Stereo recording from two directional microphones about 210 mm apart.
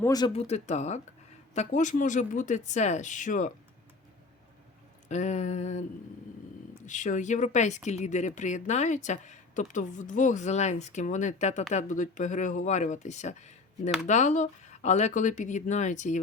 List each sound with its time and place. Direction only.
0.0 s speech: 15° left (ahead or behind)
0.3 s speech: 30° left (ahead or behind)
5.0 s speech: 35° left (ahead or behind)
6.8 s speech: 35° left (ahead or behind)